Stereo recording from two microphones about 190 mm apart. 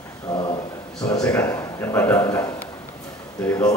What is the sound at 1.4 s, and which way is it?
A man's voice, 15° left (ahead or behind).